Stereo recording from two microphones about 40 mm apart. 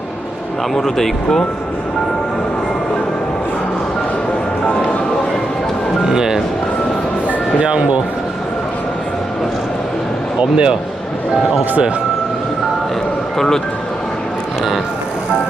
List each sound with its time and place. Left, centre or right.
0.7 s speech: centre
6.1 s music: centre
7.6 s speech: right
10.4 s speech: right